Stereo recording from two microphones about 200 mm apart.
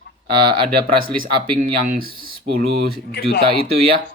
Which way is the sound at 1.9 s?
50° right (ahead or behind).